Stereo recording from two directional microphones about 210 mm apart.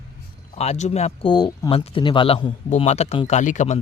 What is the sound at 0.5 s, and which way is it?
Speech, 30° left (ahead or behind).